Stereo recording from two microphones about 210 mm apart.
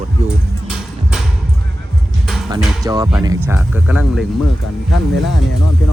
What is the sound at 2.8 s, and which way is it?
Speech, 15° right (ahead or behind).